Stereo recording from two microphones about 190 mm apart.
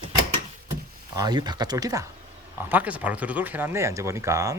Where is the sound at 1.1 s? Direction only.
20° right (ahead or behind).